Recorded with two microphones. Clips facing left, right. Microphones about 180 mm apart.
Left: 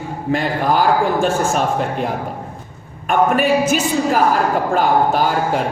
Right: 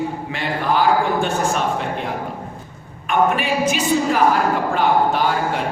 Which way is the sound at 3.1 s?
45° left (ahead or behind).